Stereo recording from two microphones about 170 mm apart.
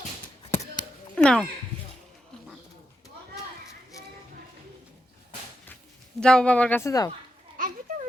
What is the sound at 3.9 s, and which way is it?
Music, 20° left (ahead or behind).